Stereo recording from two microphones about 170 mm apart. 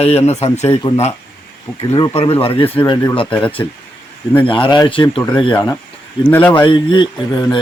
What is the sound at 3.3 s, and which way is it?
Speech, 5° left (ahead or behind).